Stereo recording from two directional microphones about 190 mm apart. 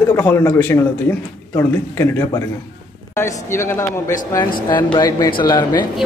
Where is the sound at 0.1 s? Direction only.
10° left (ahead or behind).